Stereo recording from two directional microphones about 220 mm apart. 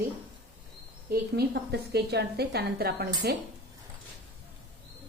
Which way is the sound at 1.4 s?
45° right (ahead or behind).